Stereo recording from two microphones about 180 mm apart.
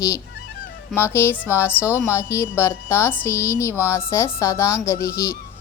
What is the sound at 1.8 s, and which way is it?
Speech, 10° right (ahead or behind).